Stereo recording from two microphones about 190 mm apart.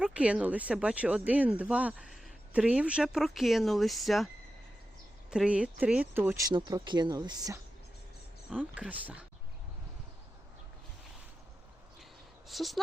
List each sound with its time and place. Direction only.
0.0 s speech: 5° right (ahead or behind)
5.3 s speech: 5° right (ahead or behind)
8.4 s speech: 5° right (ahead or behind)
12.5 s speech: centre (ahead or behind)